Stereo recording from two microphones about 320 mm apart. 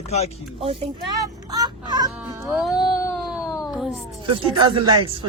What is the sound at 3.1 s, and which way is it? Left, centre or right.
Music, centre.